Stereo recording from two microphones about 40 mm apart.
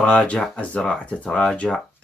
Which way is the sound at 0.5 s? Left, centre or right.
Left.